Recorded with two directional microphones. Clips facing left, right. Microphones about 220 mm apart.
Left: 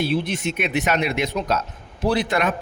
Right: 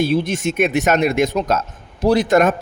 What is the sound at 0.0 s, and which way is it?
Speech, 45° right (ahead or behind).